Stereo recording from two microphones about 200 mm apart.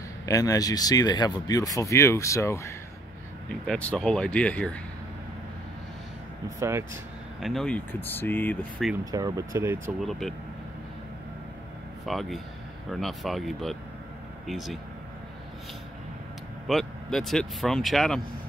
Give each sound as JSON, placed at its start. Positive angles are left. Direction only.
{"t": 0.3, "sound": "speech", "side_deg": 15}
{"t": 6.6, "sound": "speech", "side_deg": -15}
{"t": 7.3, "sound": "speech", "side_deg": 0}
{"t": 9.0, "sound": "speech", "side_deg": -20}
{"t": 10.0, "sound": "speech", "side_deg": 0}
{"t": 12.1, "sound": "speech", "side_deg": 0}
{"t": 16.6, "sound": "speech", "side_deg": 0}